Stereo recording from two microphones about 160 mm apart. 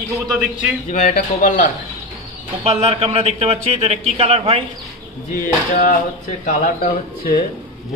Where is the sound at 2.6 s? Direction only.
40° right (ahead or behind).